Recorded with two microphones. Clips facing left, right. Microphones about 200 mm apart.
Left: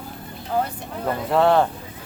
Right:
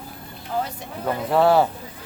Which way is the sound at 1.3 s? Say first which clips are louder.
Even; 5° right (ahead or behind).